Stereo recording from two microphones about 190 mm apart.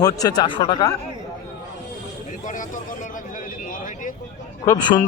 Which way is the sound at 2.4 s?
45° left (ahead or behind).